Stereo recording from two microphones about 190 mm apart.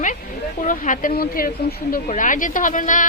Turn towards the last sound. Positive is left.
turn(degrees=45)  # may be behind; listen again after turning